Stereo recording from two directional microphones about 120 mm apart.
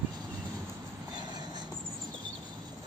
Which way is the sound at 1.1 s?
35° right (ahead or behind).